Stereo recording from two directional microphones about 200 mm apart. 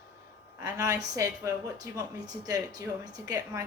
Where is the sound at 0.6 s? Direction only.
15° right (ahead or behind).